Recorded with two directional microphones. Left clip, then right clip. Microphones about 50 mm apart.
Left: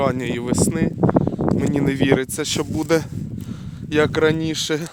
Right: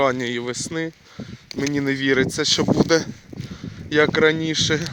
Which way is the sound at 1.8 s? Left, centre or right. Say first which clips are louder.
Even; left.